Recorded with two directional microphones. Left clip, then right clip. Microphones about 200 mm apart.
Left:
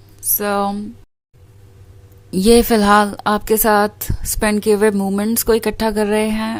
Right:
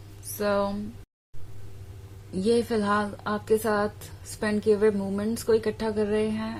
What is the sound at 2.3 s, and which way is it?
A woman's voice, 45° left (ahead or behind).